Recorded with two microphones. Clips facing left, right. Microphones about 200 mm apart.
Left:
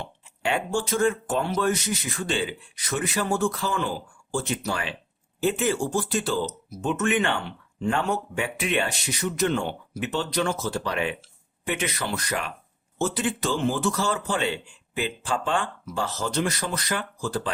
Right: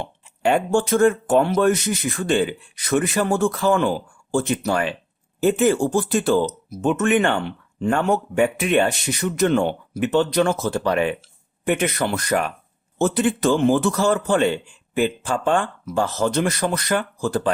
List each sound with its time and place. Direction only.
0.0 s speech: 50° right (ahead or behind)